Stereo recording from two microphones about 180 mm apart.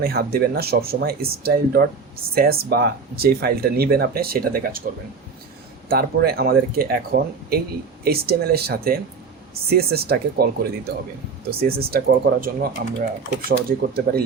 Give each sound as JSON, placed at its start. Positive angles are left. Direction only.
{"t": 0.0, "sound": "speech", "side_deg": -60}
{"t": 5.9, "sound": "speech", "side_deg": -60}